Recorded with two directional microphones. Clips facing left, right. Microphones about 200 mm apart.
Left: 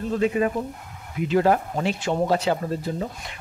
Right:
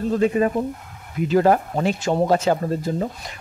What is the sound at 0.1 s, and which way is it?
Speech, 40° right (ahead or behind).